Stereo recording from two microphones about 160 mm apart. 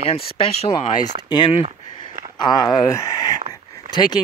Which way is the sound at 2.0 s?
25° left (ahead or behind).